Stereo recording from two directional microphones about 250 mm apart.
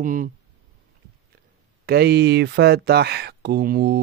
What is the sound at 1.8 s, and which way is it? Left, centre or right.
Speech, right.